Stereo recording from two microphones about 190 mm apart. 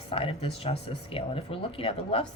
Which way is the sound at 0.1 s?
30° left (ahead or behind).